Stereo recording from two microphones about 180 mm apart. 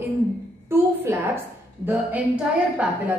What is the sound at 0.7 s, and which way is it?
A woman's voice, 15° right (ahead or behind).